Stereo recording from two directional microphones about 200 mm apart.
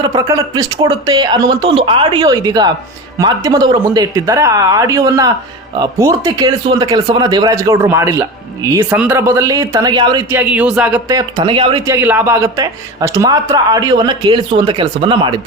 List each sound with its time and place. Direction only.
0.0 s speech: 20° right (ahead or behind)
10.3 s speech: 5° right (ahead or behind)
11.2 s speech: 25° right (ahead or behind)
11.9 s speech: 10° right (ahead or behind)